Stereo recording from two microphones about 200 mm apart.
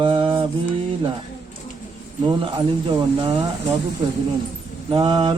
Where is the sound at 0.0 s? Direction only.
25° right (ahead or behind).